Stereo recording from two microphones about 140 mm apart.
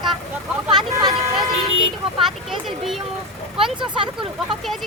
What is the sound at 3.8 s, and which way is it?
Speech, 35° right (ahead or behind).